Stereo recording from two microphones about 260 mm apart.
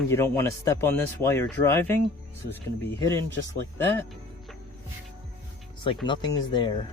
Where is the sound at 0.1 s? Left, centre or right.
Centre.